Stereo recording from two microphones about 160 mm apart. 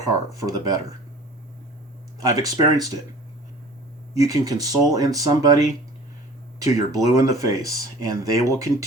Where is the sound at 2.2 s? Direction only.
20° right (ahead or behind).